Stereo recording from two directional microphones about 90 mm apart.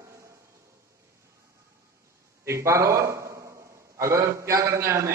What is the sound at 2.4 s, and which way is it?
A man's voice, 35° right (ahead or behind).